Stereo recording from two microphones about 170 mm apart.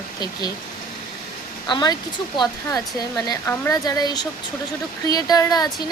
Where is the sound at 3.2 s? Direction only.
15° left (ahead or behind).